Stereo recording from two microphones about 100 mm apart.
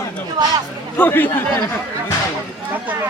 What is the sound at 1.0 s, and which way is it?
Speech, 20° left (ahead or behind).